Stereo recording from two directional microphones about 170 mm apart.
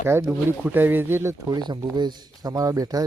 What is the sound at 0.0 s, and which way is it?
Speech, 15° right (ahead or behind).